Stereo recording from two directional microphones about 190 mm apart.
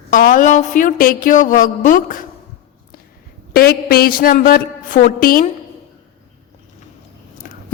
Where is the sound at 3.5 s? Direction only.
50° left (ahead or behind).